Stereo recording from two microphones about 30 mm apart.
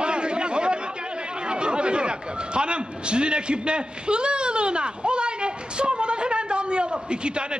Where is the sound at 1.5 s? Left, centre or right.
Right.